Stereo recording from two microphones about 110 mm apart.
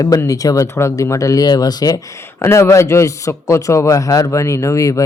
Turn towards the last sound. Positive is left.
turn(degrees=30)  # may be behind; listen again after turning